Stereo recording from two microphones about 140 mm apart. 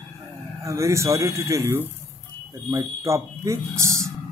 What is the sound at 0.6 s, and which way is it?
Speech, 20° right (ahead or behind).